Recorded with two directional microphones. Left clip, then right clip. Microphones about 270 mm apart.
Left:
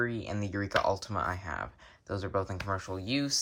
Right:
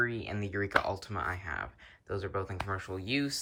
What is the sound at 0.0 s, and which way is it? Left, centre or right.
Speech, centre.